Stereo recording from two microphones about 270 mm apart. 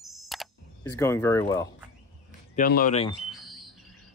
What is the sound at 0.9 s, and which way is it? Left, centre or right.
Speech, centre.